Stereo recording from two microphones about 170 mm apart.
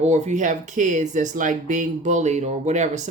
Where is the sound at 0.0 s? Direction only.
45° right (ahead or behind).